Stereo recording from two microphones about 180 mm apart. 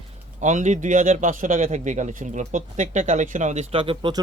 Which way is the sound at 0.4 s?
40° right (ahead or behind).